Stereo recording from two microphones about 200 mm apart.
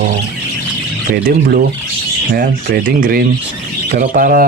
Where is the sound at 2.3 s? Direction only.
45° right (ahead or behind).